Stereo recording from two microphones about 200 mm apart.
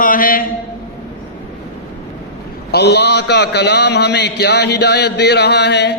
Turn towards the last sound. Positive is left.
turn(degrees=55)  # may be behind; listen again after turning